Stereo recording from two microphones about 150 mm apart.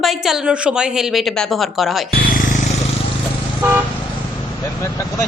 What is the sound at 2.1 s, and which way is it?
Speech, 80° left.